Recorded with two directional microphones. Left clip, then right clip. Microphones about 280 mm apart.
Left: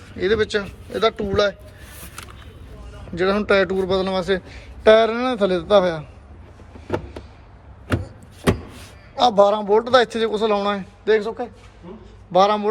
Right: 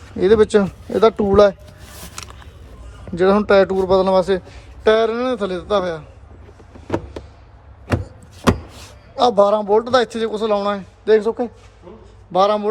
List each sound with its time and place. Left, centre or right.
0.2 s speech: right
3.2 s speech: centre
9.1 s speech: centre